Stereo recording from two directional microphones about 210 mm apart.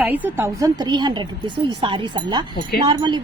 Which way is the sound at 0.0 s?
10° right (ahead or behind).